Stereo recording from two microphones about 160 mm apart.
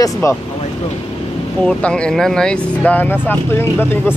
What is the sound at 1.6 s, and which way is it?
Speech, 5° left (ahead or behind).